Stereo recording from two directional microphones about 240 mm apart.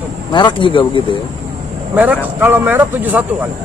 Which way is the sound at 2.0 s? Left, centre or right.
Centre.